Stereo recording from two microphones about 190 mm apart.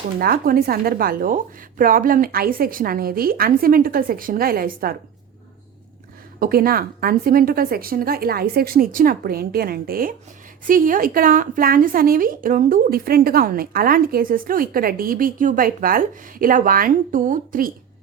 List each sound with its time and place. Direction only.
0.2 s speech: 50° right (ahead or behind)
6.4 s speech: 50° right (ahead or behind)